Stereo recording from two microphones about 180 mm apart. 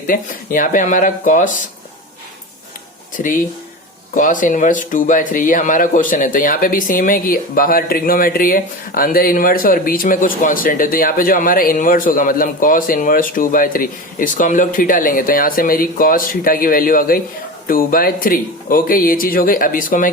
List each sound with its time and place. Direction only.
0.1 s speech: 50° left (ahead or behind)
3.2 s speech: 50° left (ahead or behind)